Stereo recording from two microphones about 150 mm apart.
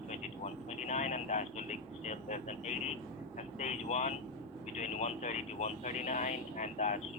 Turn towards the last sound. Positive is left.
turn(degrees=50)  # may be behind; listen again after turning